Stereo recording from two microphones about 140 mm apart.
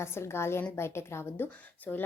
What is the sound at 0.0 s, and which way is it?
A woman's voice, 20° left (ahead or behind).